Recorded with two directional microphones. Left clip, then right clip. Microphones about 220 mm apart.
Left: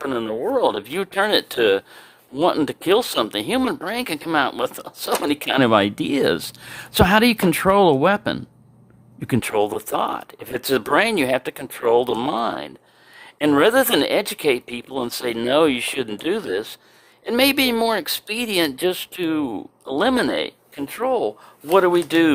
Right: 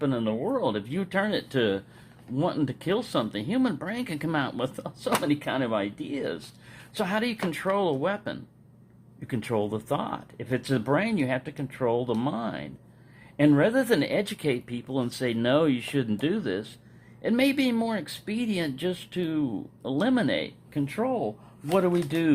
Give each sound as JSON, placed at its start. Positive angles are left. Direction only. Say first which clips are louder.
{"t": 0.0, "sound": "speech", "louder": "left 5 dB", "side_deg": 40}